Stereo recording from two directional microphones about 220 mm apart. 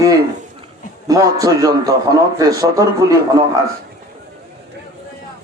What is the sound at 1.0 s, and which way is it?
A man's voice, 15° right (ahead or behind).